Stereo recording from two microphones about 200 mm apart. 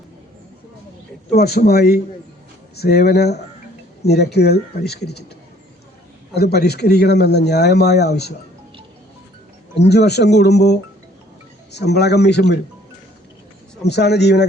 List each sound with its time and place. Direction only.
1.3 s speech: 55° left (ahead or behind)
6.3 s speech: 55° left (ahead or behind)
9.7 s speech: 55° left (ahead or behind)
13.8 s speech: 55° left (ahead or behind)